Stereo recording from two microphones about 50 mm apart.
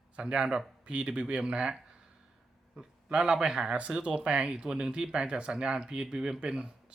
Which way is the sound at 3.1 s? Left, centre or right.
Centre.